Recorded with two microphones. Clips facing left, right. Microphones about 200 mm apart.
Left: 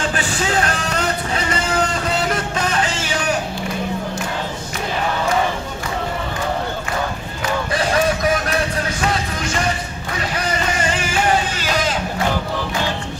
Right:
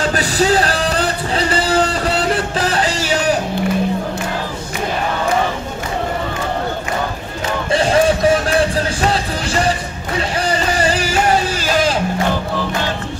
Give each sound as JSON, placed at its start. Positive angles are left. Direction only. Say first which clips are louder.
{"t": 0.1, "sound": "music", "louder": "right 6 dB", "side_deg": -35}
{"t": 7.7, "sound": "music", "louder": "right 6 dB", "side_deg": -25}